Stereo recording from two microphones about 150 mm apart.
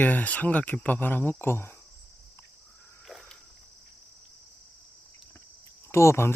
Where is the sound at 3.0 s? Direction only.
Centre (ahead or behind).